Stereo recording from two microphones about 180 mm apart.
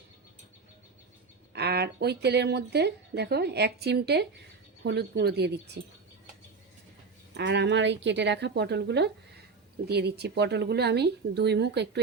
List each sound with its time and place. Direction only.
1.5 s a woman's voice: 65° right (ahead or behind)
7.3 s a woman's voice: 75° right (ahead or behind)